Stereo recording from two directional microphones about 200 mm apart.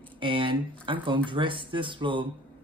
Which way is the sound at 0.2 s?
25° right (ahead or behind).